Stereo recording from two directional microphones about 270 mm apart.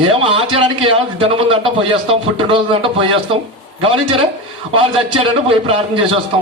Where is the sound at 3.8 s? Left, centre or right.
Centre.